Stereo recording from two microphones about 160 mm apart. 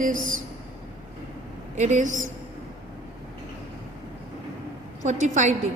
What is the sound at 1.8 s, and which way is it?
Speech, 50° right (ahead or behind).